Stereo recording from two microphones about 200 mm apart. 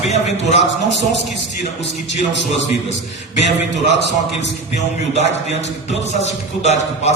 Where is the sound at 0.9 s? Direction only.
60° left (ahead or behind).